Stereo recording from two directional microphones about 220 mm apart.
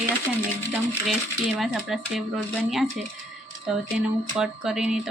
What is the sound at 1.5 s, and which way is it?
Speech, centre (ahead or behind).